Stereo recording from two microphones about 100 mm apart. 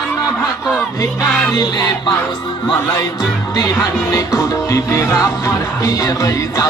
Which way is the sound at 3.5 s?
35° left (ahead or behind).